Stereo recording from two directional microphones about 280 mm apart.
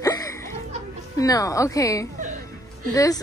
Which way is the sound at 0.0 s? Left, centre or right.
Centre.